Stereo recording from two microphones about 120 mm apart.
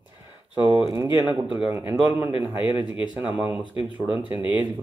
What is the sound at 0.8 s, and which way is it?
Speech, 25° right (ahead or behind).